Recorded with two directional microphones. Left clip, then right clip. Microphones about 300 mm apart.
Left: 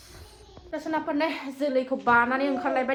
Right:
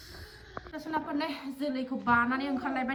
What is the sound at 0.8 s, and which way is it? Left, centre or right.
A woman's voice, centre.